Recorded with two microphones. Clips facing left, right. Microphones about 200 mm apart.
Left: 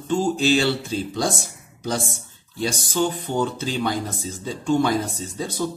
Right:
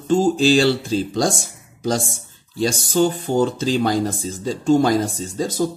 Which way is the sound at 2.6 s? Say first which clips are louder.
Right 5 dB; 45° right (ahead or behind).